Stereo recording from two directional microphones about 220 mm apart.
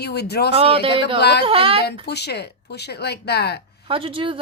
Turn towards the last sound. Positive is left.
turn(degrees=-25)  # may be behind; listen again after turning